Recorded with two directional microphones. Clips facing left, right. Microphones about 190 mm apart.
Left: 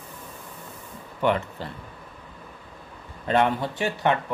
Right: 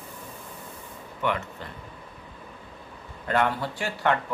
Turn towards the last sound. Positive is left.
turn(degrees=20)  # may be behind; listen again after turning